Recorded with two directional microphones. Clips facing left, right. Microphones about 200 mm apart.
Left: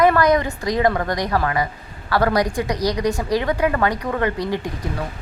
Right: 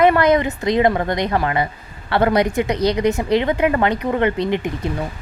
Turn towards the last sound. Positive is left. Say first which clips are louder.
# right 4 dB
turn(degrees=-25)  # may be behind; listen again after turning